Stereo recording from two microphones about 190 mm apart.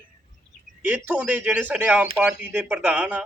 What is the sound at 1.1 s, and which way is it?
Speech, 10° right (ahead or behind).